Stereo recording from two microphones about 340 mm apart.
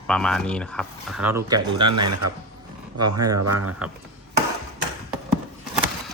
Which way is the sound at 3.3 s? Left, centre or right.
Right.